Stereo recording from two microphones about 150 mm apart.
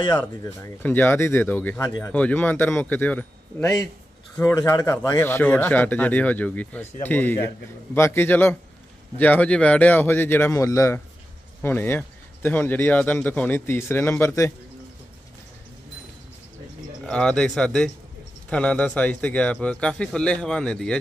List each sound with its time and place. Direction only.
0.4 s speech: 20° left (ahead or behind)
17.0 s speech: 5° left (ahead or behind)